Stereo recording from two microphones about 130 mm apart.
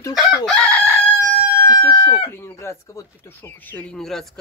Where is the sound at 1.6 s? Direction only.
20° left (ahead or behind).